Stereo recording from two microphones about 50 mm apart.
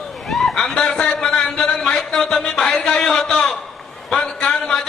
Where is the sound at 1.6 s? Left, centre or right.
Centre.